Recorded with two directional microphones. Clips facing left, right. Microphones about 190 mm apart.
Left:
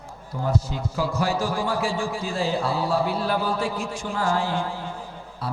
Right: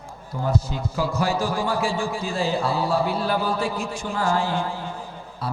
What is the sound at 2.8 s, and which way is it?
Speech, 35° right (ahead or behind).